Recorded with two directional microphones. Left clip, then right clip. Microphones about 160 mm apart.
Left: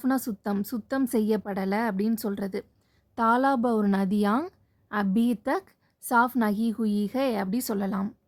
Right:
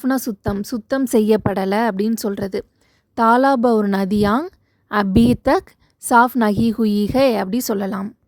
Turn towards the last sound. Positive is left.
turn(degrees=-40)  # may be behind; listen again after turning